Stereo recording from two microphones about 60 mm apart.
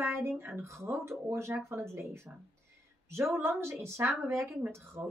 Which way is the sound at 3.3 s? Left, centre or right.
Right.